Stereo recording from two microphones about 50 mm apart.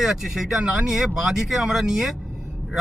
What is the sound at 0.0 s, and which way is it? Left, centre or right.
Speech, centre.